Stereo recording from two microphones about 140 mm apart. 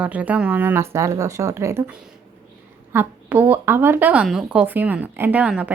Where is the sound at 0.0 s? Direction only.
10° right (ahead or behind).